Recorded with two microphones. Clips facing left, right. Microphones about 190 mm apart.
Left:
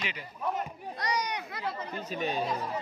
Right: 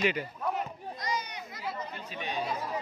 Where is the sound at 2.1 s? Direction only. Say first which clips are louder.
Left 9 dB; 40° left (ahead or behind).